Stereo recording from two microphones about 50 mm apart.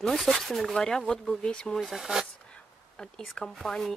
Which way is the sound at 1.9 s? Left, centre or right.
Centre.